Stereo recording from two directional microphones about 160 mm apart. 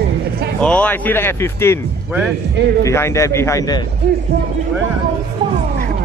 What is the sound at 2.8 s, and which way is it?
A man's voice, 15° left (ahead or behind).